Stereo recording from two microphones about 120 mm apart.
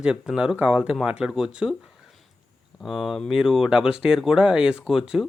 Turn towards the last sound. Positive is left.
turn(degrees=-5)  # may be behind; listen again after turning